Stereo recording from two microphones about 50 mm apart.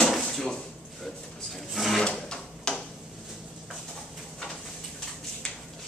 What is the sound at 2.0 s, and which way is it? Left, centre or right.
Drawer open or close, centre.